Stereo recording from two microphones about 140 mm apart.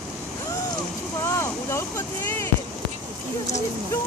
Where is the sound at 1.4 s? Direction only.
20° left (ahead or behind).